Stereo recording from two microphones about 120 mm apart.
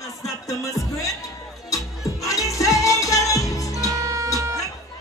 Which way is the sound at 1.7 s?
25° left (ahead or behind).